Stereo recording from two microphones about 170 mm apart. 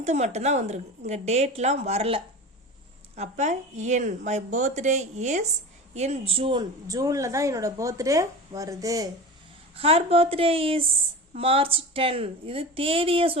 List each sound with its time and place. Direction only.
0.0 s a woman's voice: 40° right (ahead or behind); by 9.0 s 20° right (ahead or behind)
9.7 s a woman's voice: 35° right (ahead or behind)